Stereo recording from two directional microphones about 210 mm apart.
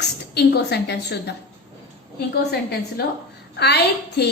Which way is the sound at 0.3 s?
55° left (ahead or behind).